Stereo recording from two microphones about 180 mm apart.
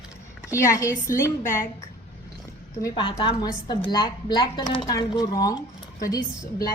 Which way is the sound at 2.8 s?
25° left (ahead or behind).